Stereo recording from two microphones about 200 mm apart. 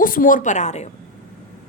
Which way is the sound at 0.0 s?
45° left (ahead or behind).